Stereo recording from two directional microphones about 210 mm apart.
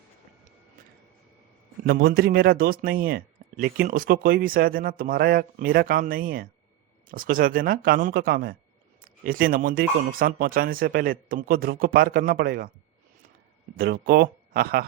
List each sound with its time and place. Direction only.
1.8 s speech: 45° right (ahead or behind)
13.7 s speech: 50° right (ahead or behind)